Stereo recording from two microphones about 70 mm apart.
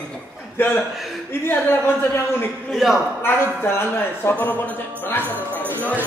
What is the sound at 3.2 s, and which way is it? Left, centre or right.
A man's voice, left.